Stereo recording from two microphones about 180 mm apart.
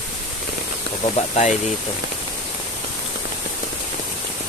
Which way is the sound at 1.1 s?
40° left (ahead or behind).